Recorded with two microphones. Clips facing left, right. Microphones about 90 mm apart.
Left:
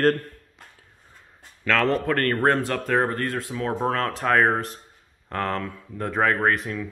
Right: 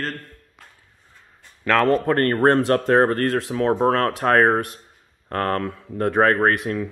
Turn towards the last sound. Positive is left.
turn(degrees=-30)  # may be behind; listen again after turning